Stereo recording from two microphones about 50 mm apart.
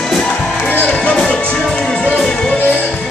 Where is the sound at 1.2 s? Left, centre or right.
Centre.